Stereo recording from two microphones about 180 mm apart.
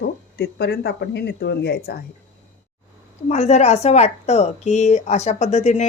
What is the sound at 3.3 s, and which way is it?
Speech, 40° left (ahead or behind).